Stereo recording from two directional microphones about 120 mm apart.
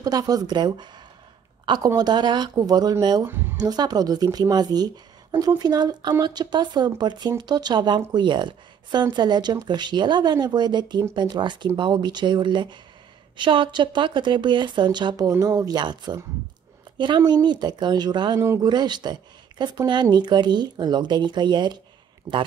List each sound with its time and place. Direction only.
0.0 s speech: 30° right (ahead or behind)
3.3 s a woman's voice: 20° right (ahead or behind)
3.5 s speech: 35° right (ahead or behind)